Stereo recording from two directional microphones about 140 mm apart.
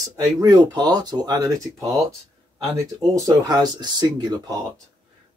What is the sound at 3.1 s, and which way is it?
Speech, 25° right (ahead or behind).